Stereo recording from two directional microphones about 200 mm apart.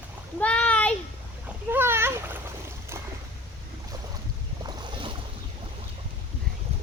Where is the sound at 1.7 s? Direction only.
10° right (ahead or behind).